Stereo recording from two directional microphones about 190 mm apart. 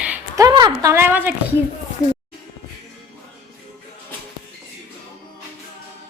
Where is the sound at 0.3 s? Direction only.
20° right (ahead or behind).